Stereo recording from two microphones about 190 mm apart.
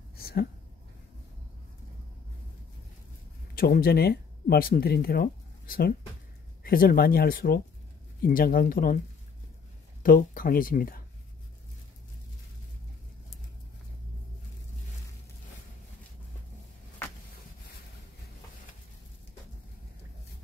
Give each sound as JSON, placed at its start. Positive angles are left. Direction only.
{"t": 0.1, "sound": "a sound", "side_deg": 55}
{"t": 3.5, "sound": "speech", "side_deg": 50}
{"t": 10.0, "sound": "speech", "side_deg": 45}